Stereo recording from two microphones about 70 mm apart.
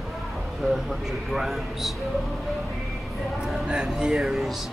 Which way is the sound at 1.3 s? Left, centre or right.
Centre.